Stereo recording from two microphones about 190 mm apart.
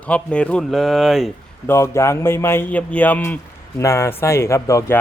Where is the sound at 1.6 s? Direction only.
15° left (ahead or behind).